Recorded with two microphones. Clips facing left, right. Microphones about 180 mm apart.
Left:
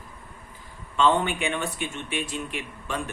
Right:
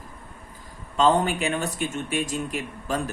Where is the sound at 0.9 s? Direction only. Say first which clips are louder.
Right 2 dB; 40° right (ahead or behind).